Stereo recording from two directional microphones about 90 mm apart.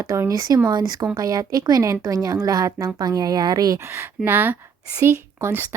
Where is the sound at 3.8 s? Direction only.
25° right (ahead or behind).